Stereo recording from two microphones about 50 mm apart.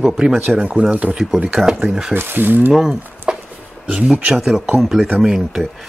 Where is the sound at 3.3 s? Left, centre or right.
Centre.